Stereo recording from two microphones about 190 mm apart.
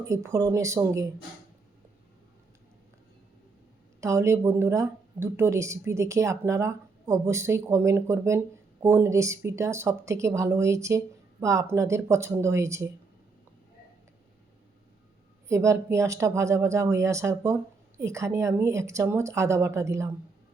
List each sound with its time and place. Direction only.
0.0 s speech: 15° right (ahead or behind)
4.0 s speech: 15° right (ahead or behind)
15.4 s speech: 15° right (ahead or behind)